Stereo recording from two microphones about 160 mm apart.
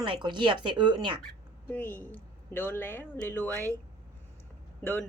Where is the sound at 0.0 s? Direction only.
30° right (ahead or behind).